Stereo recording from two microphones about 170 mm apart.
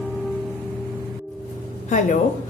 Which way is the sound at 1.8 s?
45° left (ahead or behind).